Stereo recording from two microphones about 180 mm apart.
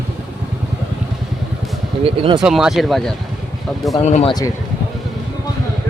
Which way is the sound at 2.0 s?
30° right (ahead or behind).